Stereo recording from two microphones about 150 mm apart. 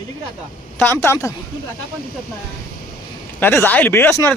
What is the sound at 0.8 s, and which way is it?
Speech, 15° left (ahead or behind).